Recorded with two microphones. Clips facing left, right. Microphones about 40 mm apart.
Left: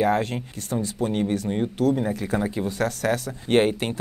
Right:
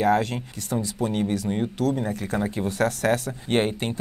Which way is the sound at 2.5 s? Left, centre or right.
Right.